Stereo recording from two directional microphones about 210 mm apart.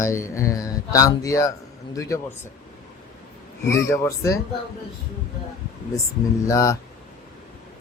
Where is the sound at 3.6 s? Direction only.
15° left (ahead or behind).